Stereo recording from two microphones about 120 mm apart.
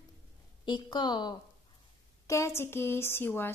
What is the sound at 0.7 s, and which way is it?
Speech, 40° left (ahead or behind).